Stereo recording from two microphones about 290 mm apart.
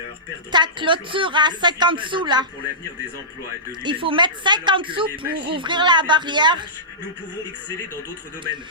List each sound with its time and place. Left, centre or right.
0.5 s speech: centre
3.7 s speech: centre